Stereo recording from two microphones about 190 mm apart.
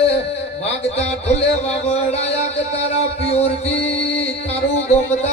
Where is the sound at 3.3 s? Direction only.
35° left (ahead or behind).